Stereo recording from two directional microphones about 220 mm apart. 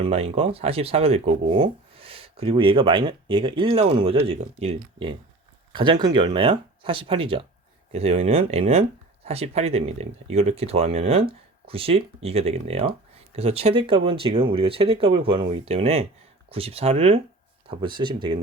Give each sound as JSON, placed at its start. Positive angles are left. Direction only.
{"t": 0.0, "sound": "speech", "side_deg": -25}